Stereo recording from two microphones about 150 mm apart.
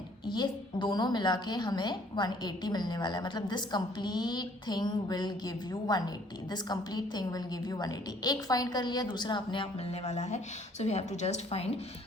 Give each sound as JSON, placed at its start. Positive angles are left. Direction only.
{"t": 0.3, "sound": "a woman's voice", "side_deg": 30}